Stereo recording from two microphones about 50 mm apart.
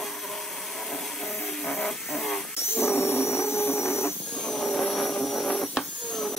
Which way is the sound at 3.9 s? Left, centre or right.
Left.